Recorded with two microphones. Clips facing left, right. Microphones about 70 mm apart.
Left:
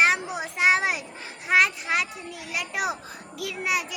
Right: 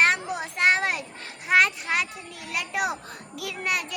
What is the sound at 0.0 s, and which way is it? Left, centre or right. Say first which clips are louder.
Children playing: even; centre.